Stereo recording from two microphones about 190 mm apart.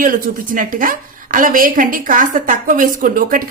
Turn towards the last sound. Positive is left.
turn(degrees=-45)  # may be behind; listen again after turning